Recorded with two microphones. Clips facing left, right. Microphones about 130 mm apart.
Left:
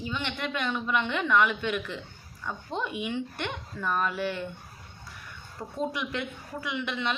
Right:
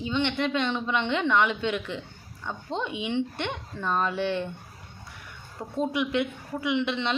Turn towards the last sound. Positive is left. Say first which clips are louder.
# right 5 dB
turn(degrees=-25)  # may be behind; listen again after turning